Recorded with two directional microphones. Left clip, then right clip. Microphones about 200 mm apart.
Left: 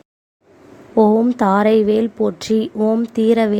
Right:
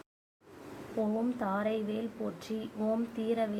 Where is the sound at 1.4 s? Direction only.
50° left (ahead or behind).